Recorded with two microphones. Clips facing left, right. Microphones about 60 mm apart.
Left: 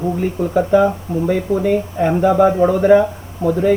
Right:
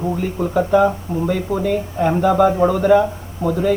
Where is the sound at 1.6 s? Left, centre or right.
Centre.